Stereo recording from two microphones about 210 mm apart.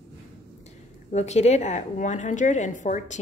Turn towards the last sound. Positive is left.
turn(degrees=35)  # may be behind; listen again after turning